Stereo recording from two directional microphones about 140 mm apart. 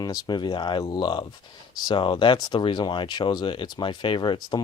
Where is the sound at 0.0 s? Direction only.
30° left (ahead or behind).